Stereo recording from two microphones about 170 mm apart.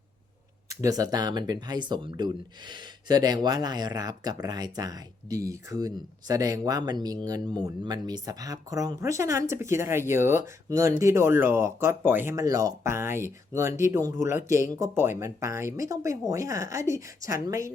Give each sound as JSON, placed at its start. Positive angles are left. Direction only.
{"t": 0.7, "sound": "speech", "side_deg": -20}